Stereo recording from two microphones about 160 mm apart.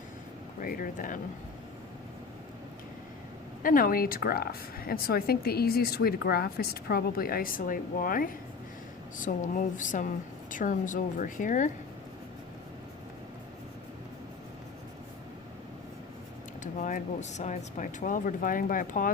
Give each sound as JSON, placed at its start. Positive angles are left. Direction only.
{"t": 0.6, "sound": "a woman's voice", "side_deg": 60}
{"t": 3.6, "sound": "a woman's voice", "side_deg": 60}
{"t": 16.7, "sound": "speech", "side_deg": 50}